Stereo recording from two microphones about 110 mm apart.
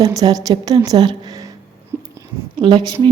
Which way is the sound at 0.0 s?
35° right (ahead or behind).